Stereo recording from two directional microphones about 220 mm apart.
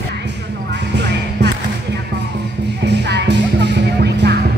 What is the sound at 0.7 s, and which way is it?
Music, 50° right (ahead or behind).